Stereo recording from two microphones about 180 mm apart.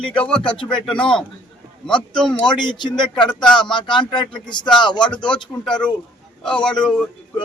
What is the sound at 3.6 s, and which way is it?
Speech, 25° left (ahead or behind).